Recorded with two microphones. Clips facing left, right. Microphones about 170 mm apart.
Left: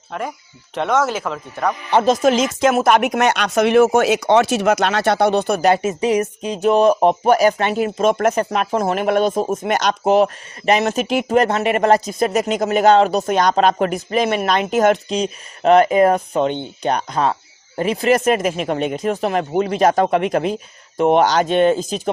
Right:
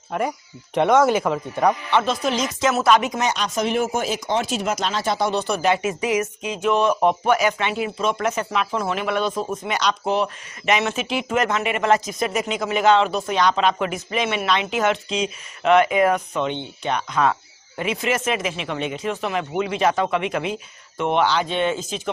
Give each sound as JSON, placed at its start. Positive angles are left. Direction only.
{"t": 0.1, "sound": "speech", "side_deg": -10}
{"t": 1.9, "sound": "speech", "side_deg": 40}
{"t": 5.8, "sound": "speech", "side_deg": 30}